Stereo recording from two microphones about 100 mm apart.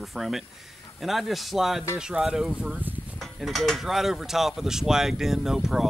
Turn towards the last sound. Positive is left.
turn(degrees=-5)  # may be behind; listen again after turning